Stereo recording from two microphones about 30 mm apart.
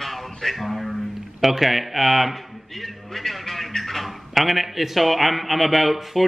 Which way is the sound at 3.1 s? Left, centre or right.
Centre.